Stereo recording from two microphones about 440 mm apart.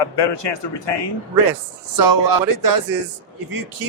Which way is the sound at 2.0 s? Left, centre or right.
Right.